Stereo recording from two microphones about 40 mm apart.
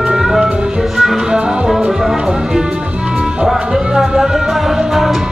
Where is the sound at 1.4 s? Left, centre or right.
Right.